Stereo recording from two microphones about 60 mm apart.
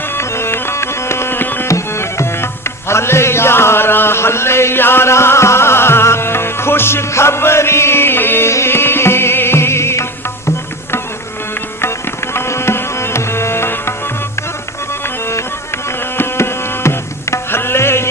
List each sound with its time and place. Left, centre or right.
0.1 s music: left
1.6 s music: left
11.8 s music: left
16.1 s tabla: left